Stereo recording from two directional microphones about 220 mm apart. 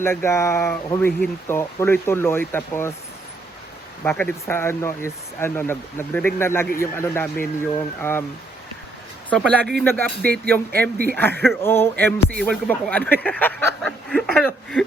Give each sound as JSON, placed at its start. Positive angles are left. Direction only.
{"t": 0.0, "sound": "speech", "side_deg": 10}
{"t": 4.0, "sound": "speech", "side_deg": 10}
{"t": 9.3, "sound": "a sound", "side_deg": 5}
{"t": 9.7, "sound": "speech", "side_deg": 10}
{"t": 10.9, "sound": "speech", "side_deg": -45}
{"t": 11.2, "sound": "speech", "side_deg": 10}
{"t": 13.2, "sound": "a sound", "side_deg": 10}